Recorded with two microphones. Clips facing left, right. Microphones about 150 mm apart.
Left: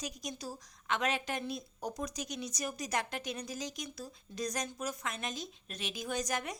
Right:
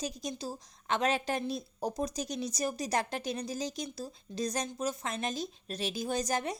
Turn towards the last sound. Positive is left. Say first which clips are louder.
# right 4 dB
turn(degrees=-30)  # may be behind; listen again after turning